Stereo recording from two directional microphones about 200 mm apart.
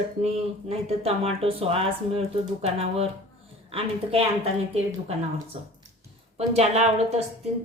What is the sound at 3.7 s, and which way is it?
A woman's voice, 30° right (ahead or behind).